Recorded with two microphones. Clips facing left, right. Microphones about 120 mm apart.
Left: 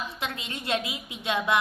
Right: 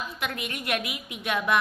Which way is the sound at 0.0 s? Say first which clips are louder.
Right 1 dB; 25° left (ahead or behind).